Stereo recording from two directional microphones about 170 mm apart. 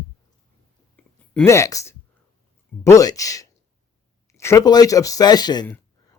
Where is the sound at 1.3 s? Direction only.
10° left (ahead or behind).